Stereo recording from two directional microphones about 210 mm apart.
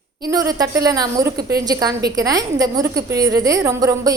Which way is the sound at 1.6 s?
20° right (ahead or behind).